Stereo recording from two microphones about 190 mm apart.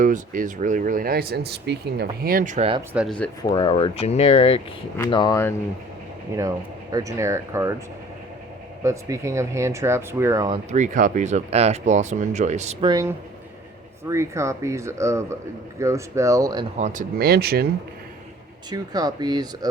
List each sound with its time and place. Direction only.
0.0 s speech: 45° right (ahead or behind)
2.9 s speech: 5° right (ahead or behind)
3.4 s speech: 25° left (ahead or behind)
5.1 s speech: 20° left (ahead or behind)
6.9 s speech: 15° right (ahead or behind)
8.8 s speech: 15° right (ahead or behind)
10.7 s speech: 40° right (ahead or behind)
12.8 s speech: 20° right (ahead or behind)
16.7 s speech: 40° right (ahead or behind); by 17.7 s 55° right (ahead or behind)
18.7 s speech: 20° right (ahead or behind)